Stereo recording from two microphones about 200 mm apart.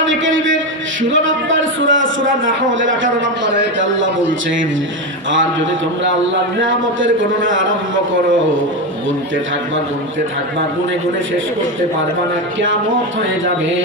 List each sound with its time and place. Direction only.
0.1 s a man's voice: 70° right (ahead or behind)
1.8 s a sound: 70° right (ahead or behind)
2.6 s a man's voice: 70° right (ahead or behind)
6.6 s a man's voice: 70° right (ahead or behind)